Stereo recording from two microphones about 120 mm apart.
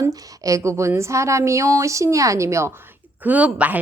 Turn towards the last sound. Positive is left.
turn(degrees=-10)  # may be behind; listen again after turning